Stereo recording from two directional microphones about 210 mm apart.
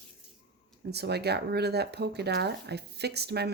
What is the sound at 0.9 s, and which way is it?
Speech, 50° right (ahead or behind).